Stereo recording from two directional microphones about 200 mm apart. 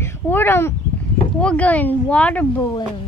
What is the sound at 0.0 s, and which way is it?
Speech, 10° left (ahead or behind).